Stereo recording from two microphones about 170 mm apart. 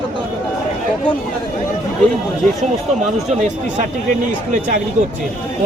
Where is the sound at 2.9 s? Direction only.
45° right (ahead or behind).